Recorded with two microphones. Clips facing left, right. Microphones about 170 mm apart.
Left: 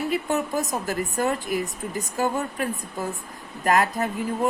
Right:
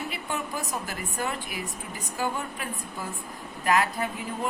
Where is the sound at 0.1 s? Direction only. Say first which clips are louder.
Left 8 dB; 40° left (ahead or behind).